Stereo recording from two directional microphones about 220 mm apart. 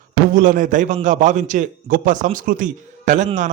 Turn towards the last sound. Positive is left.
turn(degrees=-35)  # may be behind; listen again after turning